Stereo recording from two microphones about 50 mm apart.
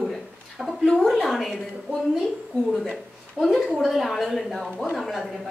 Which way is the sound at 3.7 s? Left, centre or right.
Centre.